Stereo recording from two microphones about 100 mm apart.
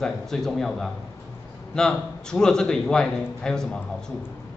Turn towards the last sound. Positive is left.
turn(degrees=5)  # may be behind; listen again after turning